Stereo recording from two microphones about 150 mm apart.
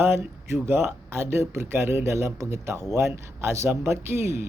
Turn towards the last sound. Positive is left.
turn(degrees=-15)  # may be behind; listen again after turning